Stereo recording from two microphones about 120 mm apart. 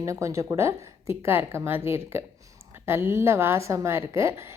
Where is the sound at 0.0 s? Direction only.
25° right (ahead or behind).